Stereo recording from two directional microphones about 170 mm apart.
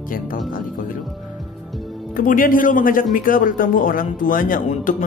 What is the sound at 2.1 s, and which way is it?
Speech, 55° left (ahead or behind).